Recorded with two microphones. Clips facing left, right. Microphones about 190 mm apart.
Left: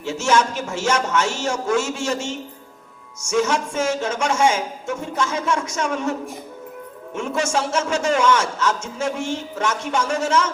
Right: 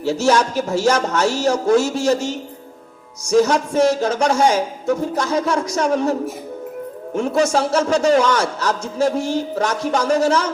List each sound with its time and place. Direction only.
0.0 s a man's voice: 35° right (ahead or behind)